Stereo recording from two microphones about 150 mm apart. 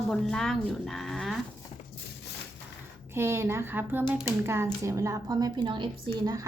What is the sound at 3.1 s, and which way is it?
Speech, 15° right (ahead or behind).